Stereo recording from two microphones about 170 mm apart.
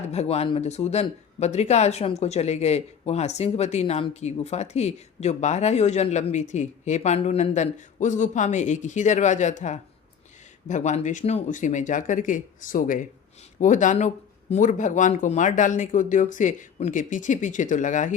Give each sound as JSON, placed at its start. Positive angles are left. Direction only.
{"t": 0.1, "sound": "speech", "side_deg": 40}